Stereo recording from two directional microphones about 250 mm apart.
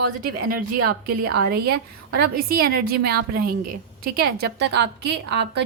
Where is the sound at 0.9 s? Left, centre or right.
Right.